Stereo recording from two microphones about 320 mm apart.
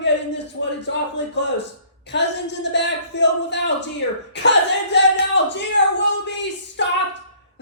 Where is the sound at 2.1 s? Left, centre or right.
Left.